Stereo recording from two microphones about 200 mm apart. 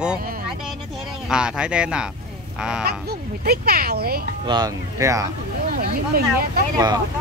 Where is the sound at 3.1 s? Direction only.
50° right (ahead or behind).